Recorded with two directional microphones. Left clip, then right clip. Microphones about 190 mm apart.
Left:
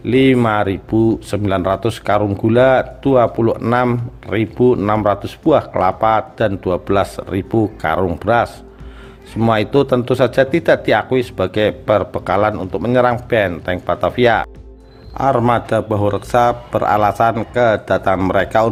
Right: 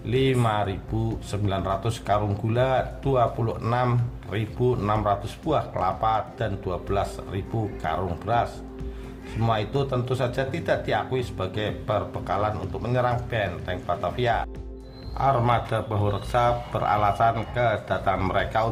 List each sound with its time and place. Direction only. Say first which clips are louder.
0.0 s speech: left 11 dB; 45° left (ahead or behind)